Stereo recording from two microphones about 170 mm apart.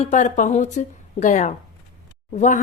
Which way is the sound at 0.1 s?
50° left (ahead or behind).